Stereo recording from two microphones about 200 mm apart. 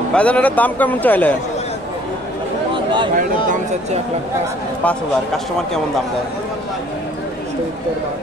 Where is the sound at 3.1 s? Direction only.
40° right (ahead or behind).